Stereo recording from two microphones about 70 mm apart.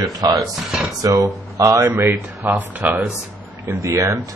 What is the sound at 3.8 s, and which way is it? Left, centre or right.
Speech, right.